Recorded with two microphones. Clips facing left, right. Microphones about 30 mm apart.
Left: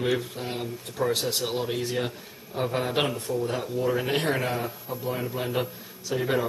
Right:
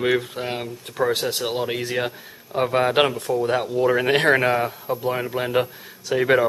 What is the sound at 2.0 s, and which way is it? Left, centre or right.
Speech, right.